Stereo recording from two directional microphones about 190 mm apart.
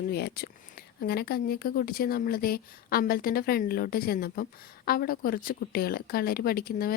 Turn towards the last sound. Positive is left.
turn(degrees=50)  # may be behind; listen again after turning